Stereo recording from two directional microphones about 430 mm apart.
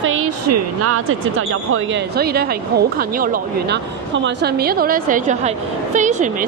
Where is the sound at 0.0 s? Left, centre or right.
Right.